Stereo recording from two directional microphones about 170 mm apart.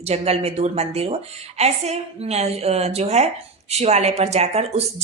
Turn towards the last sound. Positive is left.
turn(degrees=-40)  # may be behind; listen again after turning